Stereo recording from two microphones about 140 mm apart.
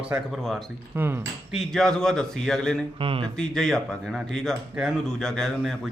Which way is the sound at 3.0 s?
40° right (ahead or behind).